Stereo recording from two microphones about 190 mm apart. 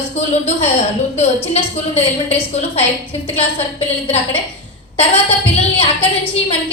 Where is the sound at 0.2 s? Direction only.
35° left (ahead or behind).